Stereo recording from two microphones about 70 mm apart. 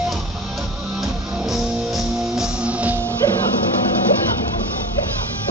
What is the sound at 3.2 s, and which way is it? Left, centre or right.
Music, left.